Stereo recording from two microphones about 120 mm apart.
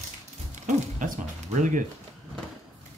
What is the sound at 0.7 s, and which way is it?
Speech, 85° right.